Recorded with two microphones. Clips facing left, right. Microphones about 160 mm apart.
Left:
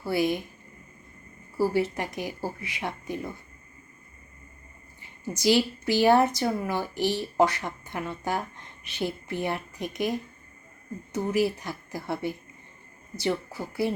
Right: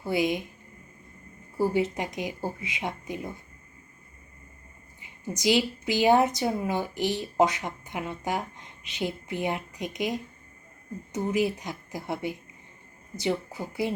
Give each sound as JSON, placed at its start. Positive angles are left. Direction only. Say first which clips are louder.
{"t": 0.0, "sound": "a woman's voice", "louder": "left 1 dB", "side_deg": -15}
{"t": 1.5, "sound": "a woman's voice", "louder": "even", "side_deg": -20}
{"t": 4.9, "sound": "a woman's voice", "louder": "even", "side_deg": -15}